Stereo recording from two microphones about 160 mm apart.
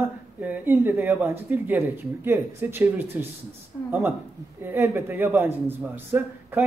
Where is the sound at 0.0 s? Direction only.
10° right (ahead or behind).